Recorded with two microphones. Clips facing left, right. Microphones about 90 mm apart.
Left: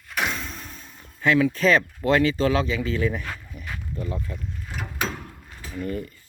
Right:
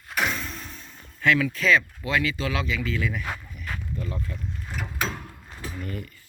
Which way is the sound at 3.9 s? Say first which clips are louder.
Left 4 dB; 25° left (ahead or behind).